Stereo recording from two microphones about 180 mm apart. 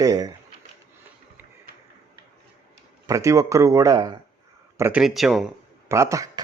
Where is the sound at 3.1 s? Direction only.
20° right (ahead or behind).